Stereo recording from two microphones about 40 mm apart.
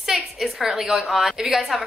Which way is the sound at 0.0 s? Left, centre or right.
Centre.